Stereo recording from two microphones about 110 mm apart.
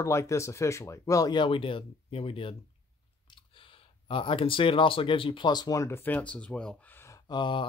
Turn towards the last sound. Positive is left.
turn(degrees=45)  # may be behind; listen again after turning